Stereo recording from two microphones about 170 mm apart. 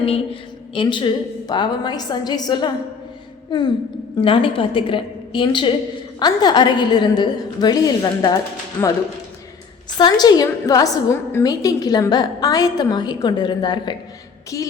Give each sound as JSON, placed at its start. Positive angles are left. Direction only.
{"t": 0.0, "sound": "a woman's voice", "side_deg": 35}
{"t": 10.0, "sound": "a woman's voice", "side_deg": 25}